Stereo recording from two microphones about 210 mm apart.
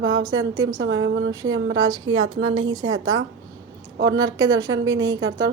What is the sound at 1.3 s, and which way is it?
Speech, 15° right (ahead or behind).